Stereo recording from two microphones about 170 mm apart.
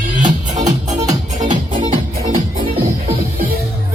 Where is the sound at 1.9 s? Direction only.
40° right (ahead or behind).